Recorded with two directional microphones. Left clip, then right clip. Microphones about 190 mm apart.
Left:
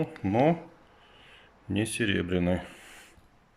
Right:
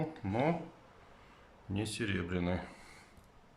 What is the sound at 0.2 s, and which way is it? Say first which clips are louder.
Speech: left 9 dB; 10° left (ahead or behind).